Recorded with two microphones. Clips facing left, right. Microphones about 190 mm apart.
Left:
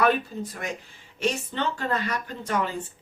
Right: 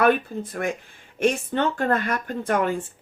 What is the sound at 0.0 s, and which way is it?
Speech, 55° right (ahead or behind).